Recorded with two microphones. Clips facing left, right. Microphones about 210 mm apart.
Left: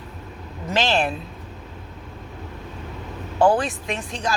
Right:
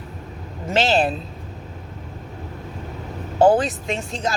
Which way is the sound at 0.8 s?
35° right (ahead or behind).